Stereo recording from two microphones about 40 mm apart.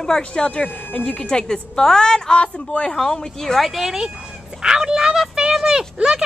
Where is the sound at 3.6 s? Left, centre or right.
Centre.